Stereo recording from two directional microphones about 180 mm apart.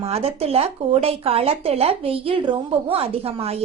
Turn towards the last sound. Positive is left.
turn(degrees=-35)  # may be behind; listen again after turning